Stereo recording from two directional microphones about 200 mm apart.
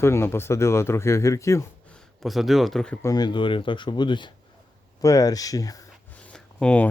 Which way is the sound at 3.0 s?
20° left (ahead or behind).